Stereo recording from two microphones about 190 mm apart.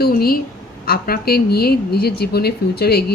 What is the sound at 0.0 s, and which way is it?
A woman's voice, 50° left (ahead or behind).